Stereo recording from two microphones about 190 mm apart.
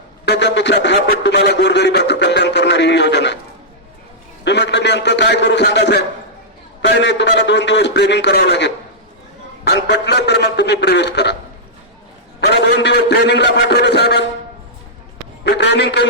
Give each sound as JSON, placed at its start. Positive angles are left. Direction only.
{"t": 0.3, "sound": "speech", "side_deg": 65}
{"t": 4.4, "sound": "a man's voice", "side_deg": 65}
{"t": 12.4, "sound": "speech", "side_deg": 65}
{"t": 15.4, "sound": "speech", "side_deg": 60}